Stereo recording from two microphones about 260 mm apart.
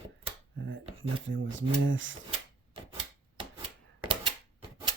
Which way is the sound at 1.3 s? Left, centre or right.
Right.